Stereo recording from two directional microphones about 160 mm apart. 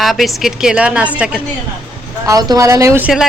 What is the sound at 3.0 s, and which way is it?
Speech, centre (ahead or behind).